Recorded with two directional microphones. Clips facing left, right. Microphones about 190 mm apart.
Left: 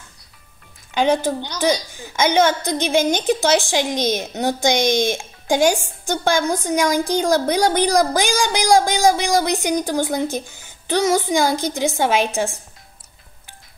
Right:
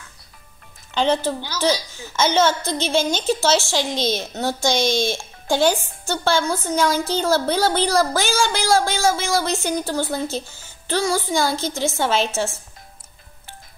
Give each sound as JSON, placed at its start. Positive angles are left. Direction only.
{"t": 0.9, "sound": "a woman's voice", "side_deg": 15}